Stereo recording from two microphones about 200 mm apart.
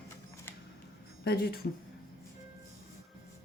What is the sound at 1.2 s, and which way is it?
Speech, 55° left (ahead or behind).